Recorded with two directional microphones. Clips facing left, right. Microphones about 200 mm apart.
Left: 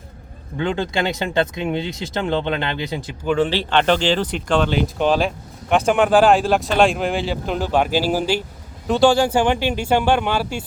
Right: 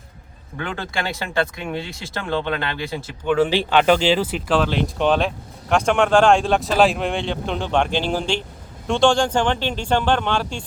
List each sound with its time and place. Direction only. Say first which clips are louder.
0.5 s speech: left 6 dB; 20° left (ahead or behind)
3.2 s speech: right 1 dB; 10° right (ahead or behind)